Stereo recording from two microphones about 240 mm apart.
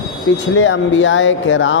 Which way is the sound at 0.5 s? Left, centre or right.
Left.